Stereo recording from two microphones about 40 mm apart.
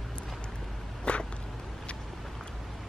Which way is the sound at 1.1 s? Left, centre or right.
Left.